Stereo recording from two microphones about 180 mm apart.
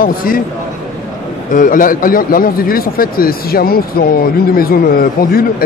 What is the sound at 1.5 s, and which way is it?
A man's voice, 50° left (ahead or behind).